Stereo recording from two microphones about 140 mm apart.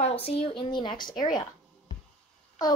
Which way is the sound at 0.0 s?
45° left (ahead or behind).